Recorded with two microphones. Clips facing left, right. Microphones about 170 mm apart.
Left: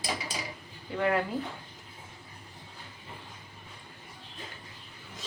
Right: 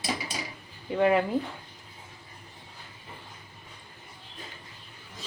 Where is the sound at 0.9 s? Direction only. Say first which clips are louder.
Right 5 dB; 20° right (ahead or behind).